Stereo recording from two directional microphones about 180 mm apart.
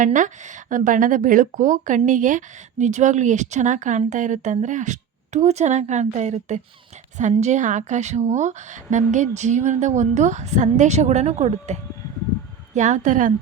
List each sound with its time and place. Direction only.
0.0 s speech: 45° right (ahead or behind)